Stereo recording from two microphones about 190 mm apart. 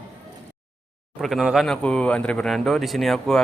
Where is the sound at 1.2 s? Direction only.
Centre (ahead or behind).